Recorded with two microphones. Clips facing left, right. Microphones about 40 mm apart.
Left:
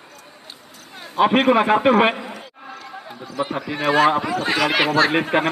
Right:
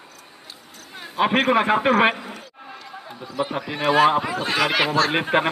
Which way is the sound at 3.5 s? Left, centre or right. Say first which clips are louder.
Left 1 dB; centre.